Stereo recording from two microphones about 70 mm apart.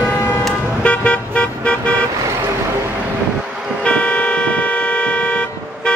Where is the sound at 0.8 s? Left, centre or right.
Centre.